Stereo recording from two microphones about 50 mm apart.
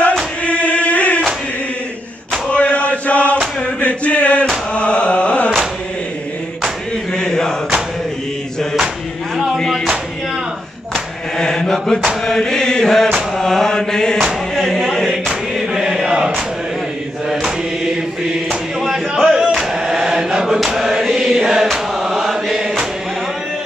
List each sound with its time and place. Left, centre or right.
0.4 s choir: left
2.5 s chant: left
3.6 s a sound: left
4.7 s carnatic music: left
7.2 s chant: centre
11.3 s mantra: centre
12.3 s chant: centre
13.4 s mantra: centre
14.5 s a sound: centre
15.2 s choir: centre
17.3 s mantra: centre
18.5 s chant: centre